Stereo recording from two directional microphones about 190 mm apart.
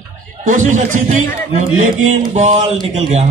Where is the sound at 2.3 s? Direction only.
40° right (ahead or behind).